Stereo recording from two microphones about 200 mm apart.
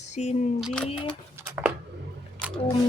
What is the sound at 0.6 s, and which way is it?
Speech, centre (ahead or behind).